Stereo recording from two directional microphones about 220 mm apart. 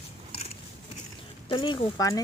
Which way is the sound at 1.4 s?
25° left (ahead or behind).